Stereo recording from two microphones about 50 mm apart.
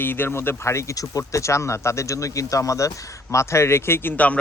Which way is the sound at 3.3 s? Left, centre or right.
Left.